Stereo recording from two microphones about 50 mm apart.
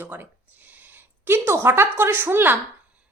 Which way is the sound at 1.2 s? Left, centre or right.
Right.